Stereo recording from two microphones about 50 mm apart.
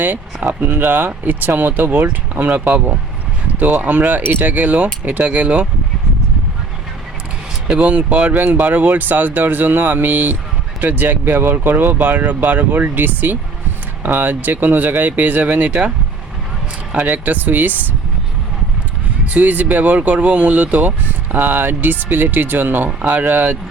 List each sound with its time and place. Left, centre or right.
0.6 s speech: right
3.6 s speech: right
7.8 s speech: right
16.9 s speech: right
19.3 s speech: right
21.3 s speech: right